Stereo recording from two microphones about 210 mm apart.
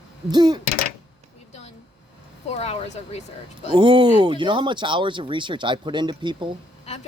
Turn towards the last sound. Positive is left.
turn(degrees=-20)  # may be behind; listen again after turning